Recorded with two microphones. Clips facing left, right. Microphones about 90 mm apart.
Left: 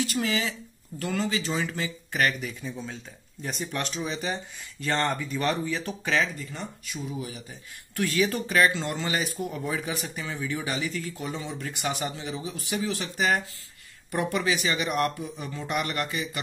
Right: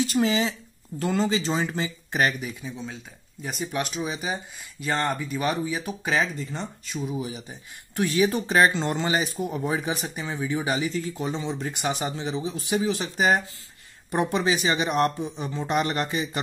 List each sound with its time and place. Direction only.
0.0 s speech: 25° right (ahead or behind)
2.6 s speech: centre (ahead or behind); by 16.3 s 25° right (ahead or behind)